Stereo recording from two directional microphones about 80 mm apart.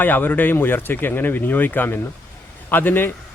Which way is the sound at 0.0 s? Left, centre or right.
Left.